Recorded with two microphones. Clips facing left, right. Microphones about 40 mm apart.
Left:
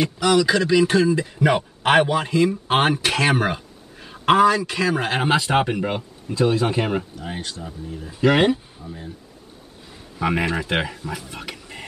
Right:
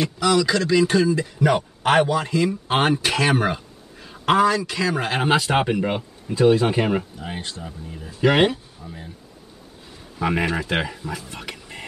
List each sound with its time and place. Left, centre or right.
0.0 s a man's voice: centre
1.8 s a man's voice: left
2.2 s a man's voice: centre
3.0 s a man's voice: centre
10.1 s a man's voice: centre